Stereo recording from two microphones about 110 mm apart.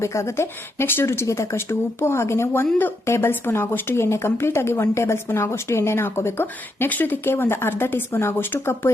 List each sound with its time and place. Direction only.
0.0 s speech: 25° left (ahead or behind)